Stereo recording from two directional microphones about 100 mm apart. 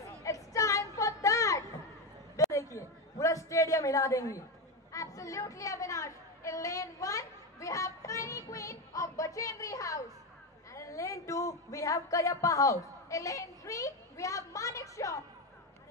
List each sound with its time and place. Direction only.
0.0 s a sound: 35° left (ahead or behind)
4.9 s chatter: 35° left (ahead or behind)
10.7 s speech: 30° left (ahead or behind)